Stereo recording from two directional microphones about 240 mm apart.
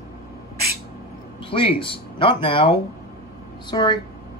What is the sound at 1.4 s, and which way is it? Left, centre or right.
Speech, left.